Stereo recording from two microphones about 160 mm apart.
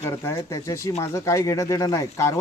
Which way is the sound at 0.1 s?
20° left (ahead or behind).